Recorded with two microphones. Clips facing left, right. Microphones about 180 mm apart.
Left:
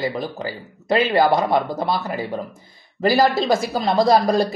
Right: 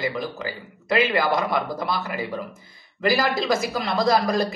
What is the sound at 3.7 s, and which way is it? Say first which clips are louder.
Speech: left 6 dB; 35° left (ahead or behind).